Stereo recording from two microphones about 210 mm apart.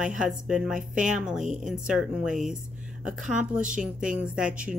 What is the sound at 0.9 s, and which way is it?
Speech, 35° right (ahead or behind).